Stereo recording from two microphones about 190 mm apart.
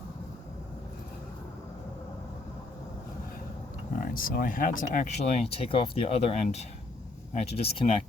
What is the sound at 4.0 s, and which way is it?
Speech, 50° left (ahead or behind).